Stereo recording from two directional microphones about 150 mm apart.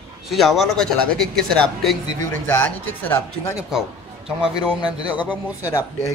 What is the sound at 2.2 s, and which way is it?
Speech, 15° left (ahead or behind).